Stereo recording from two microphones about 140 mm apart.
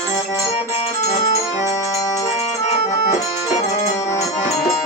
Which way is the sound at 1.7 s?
25° left (ahead or behind).